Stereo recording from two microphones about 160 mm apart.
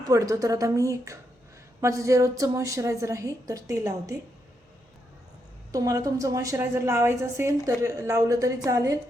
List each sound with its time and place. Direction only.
0.0 s a woman's voice: 20° right (ahead or behind)
5.7 s a woman's voice: 20° right (ahead or behind)